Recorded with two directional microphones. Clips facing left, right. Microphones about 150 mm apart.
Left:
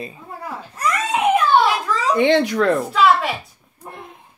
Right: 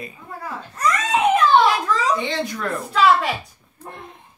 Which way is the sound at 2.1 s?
65° left (ahead or behind).